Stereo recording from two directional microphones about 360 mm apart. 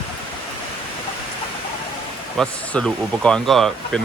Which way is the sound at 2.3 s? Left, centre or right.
Centre.